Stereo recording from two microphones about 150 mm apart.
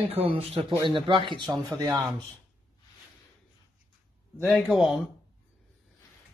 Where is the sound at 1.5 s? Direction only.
20° right (ahead or behind).